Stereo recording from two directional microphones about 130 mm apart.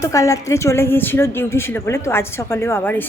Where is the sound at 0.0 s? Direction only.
25° left (ahead or behind).